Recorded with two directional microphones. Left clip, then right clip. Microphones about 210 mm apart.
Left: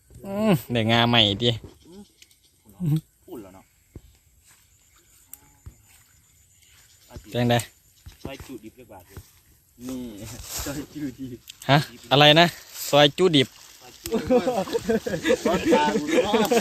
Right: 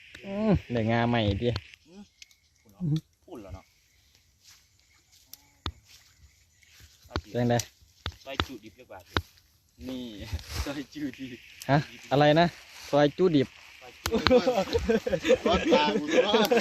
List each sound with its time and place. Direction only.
0.2 s speech: 10° left (ahead or behind)
3.2 s a sound: 5° right (ahead or behind)
7.3 s speech: 5° left (ahead or behind)
11.6 s speech: 5° left (ahead or behind)
14.1 s speech: 20° left (ahead or behind)
14.7 s speech: 30° left (ahead or behind)
15.4 s speech: 30° left (ahead or behind)
16.2 s speech: 45° left (ahead or behind)